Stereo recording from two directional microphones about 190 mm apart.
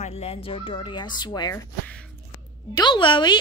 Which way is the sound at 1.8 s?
5° left (ahead or behind).